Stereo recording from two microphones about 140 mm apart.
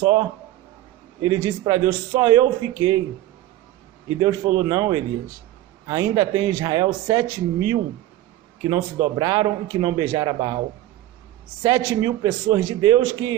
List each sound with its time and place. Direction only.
0.0 s a man's voice: 30° right (ahead or behind)
4.2 s a man's voice: 30° right (ahead or behind)
11.6 s a man's voice: 25° right (ahead or behind)